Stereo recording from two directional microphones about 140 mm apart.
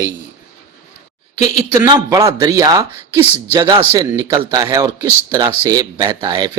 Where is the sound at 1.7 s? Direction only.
25° right (ahead or behind).